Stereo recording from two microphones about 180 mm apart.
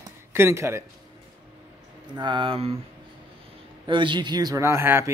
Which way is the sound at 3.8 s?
25° right (ahead or behind).